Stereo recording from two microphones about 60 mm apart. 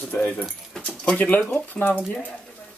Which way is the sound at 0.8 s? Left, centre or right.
Centre.